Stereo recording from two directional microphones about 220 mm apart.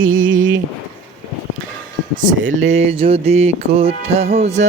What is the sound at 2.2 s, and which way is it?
Music, 35° right (ahead or behind).